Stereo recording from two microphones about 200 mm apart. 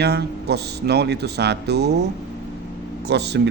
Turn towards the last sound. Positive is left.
turn(degrees=-55)  # may be behind; listen again after turning